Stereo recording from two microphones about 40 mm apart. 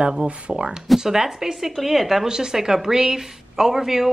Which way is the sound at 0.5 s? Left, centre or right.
Centre.